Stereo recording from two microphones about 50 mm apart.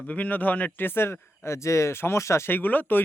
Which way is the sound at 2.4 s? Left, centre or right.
Left.